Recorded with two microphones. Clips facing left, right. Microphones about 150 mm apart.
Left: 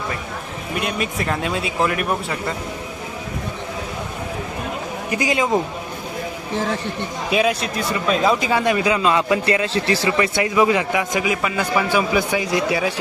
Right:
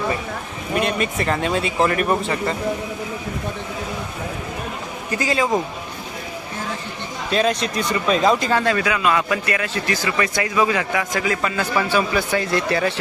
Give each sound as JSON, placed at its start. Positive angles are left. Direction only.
{"t": 0.7, "sound": "speech", "side_deg": 5}
{"t": 5.1, "sound": "speech", "side_deg": 15}
{"t": 7.3, "sound": "speech", "side_deg": 10}